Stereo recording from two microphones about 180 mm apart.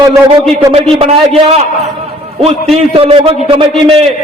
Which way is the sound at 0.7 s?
35° right (ahead or behind).